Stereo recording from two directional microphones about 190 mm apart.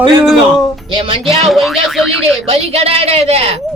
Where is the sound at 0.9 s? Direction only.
25° right (ahead or behind).